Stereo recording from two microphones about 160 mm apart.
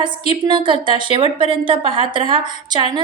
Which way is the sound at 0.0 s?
30° right (ahead or behind).